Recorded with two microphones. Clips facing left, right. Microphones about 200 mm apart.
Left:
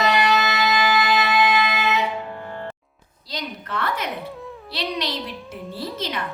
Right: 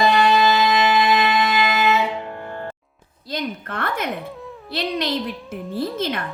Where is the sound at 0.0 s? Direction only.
30° right (ahead or behind).